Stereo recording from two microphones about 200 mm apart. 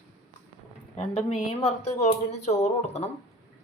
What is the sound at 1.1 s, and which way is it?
Speech, 30° left (ahead or behind).